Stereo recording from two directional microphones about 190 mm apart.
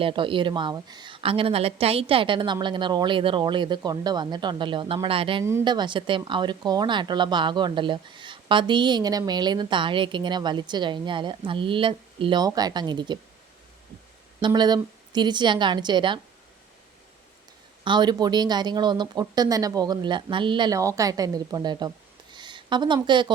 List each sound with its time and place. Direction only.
0.0 s a woman's voice: 25° right (ahead or behind)
14.4 s a woman's voice: 20° right (ahead or behind)
17.8 s a woman's voice: 25° right (ahead or behind)